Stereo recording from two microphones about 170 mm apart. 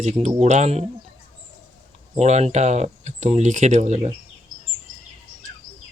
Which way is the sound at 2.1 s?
40° right (ahead or behind).